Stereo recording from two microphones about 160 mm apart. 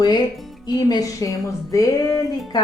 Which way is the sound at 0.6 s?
25° left (ahead or behind).